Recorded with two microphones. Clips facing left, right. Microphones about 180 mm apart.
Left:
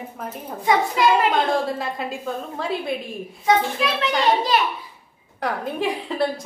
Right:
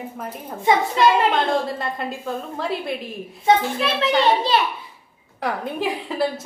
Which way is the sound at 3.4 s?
25° right (ahead or behind).